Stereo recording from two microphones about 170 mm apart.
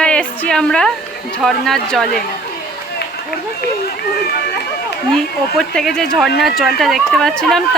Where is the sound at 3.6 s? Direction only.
65° left (ahead or behind).